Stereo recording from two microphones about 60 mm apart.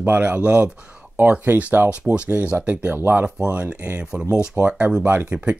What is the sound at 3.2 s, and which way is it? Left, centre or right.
Speech, right.